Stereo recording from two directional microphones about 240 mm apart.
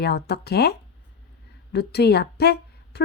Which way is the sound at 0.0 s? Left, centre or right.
Left.